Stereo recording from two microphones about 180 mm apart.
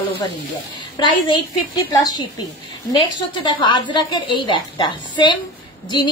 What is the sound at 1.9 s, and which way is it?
Speech, 25° left (ahead or behind).